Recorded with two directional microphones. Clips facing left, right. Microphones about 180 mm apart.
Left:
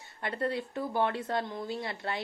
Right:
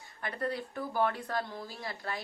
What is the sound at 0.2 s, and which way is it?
Speech, 25° left (ahead or behind).